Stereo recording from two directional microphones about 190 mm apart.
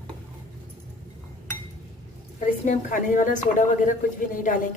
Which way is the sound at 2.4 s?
40° left (ahead or behind).